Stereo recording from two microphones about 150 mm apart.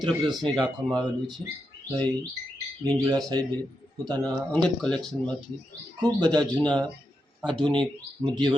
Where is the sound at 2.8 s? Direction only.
25° right (ahead or behind).